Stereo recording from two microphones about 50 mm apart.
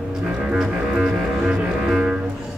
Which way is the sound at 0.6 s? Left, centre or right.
Centre.